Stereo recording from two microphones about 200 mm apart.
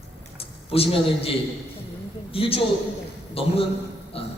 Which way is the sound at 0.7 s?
30° left (ahead or behind).